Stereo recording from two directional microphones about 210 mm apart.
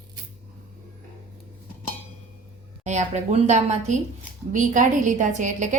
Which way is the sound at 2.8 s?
35° right (ahead or behind).